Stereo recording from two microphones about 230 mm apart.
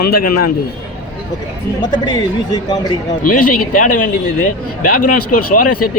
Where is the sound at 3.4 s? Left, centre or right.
Left.